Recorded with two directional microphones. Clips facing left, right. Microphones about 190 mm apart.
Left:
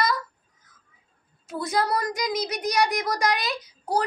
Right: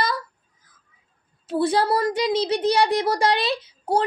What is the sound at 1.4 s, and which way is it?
A child's voice, 30° right (ahead or behind).